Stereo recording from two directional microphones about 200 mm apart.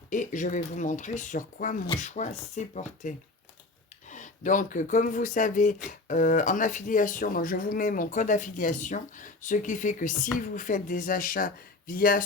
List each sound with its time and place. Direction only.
0.1 s speech: 40° left (ahead or behind)